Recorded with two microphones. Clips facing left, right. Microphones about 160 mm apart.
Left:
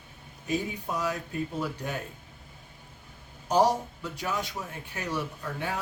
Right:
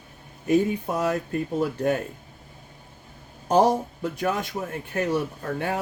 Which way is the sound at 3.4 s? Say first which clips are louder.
Right 4 dB; 50° right (ahead or behind).